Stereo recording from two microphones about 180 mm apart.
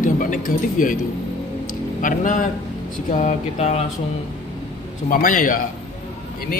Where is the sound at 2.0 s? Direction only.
45° left (ahead or behind).